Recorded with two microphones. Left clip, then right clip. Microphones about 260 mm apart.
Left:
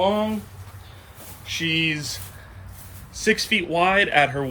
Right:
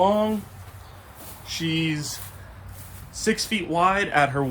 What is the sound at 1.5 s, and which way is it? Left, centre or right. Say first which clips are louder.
Speech: left 4 dB; centre.